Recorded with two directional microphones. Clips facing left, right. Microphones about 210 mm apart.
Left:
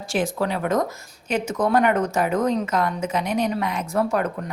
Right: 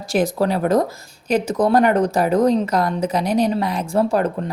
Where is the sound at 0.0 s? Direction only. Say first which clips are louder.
Right 5 dB; 40° right (ahead or behind).